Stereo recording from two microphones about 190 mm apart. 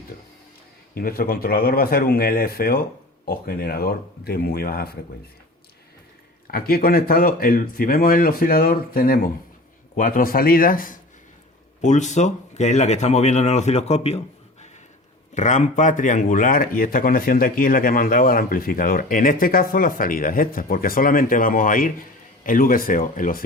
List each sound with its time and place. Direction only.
0.9 s speech: 50° left (ahead or behind)
6.5 s speech: 50° left (ahead or behind); by 14.2 s 35° left (ahead or behind)
15.4 s speech: 40° left (ahead or behind)